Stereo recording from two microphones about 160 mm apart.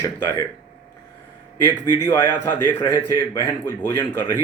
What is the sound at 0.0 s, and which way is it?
Speech, 15° left (ahead or behind).